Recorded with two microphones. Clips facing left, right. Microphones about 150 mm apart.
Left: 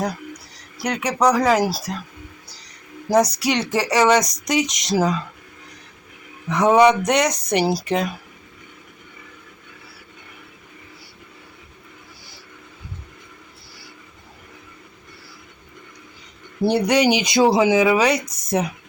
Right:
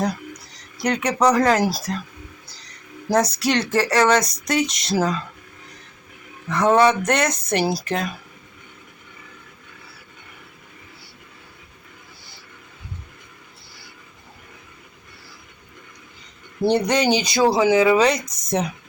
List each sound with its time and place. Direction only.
0.5 s speech: 5° left (ahead or behind)
3.1 s speech: 15° left (ahead or behind)
6.5 s speech: 15° left (ahead or behind)
16.6 s speech: 10° left (ahead or behind)